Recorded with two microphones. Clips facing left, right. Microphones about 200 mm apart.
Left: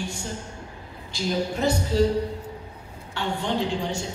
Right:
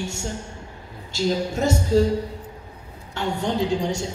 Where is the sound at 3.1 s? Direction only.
40° right (ahead or behind).